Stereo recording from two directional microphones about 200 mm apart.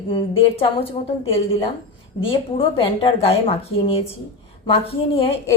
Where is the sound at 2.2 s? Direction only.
25° left (ahead or behind).